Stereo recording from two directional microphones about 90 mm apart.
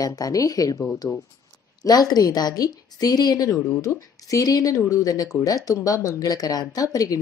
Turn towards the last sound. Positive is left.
turn(degrees=40)  # may be behind; listen again after turning